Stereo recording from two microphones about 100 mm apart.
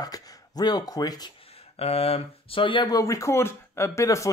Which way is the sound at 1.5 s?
80° left.